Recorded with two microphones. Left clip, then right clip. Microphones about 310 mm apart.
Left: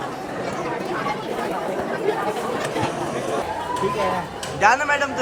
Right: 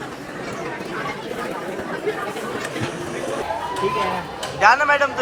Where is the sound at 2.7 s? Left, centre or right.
Centre.